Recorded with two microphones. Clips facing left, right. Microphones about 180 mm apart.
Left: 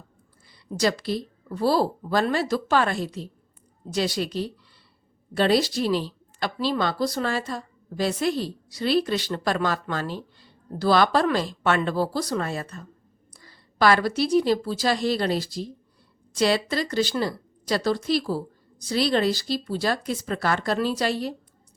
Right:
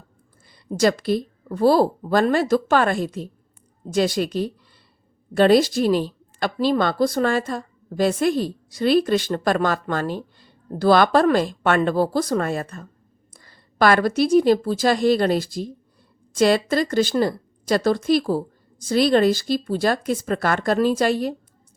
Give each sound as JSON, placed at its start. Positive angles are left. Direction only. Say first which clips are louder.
{"t": 0.8, "sound": "a woman's voice", "louder": "right 5 dB", "side_deg": -50}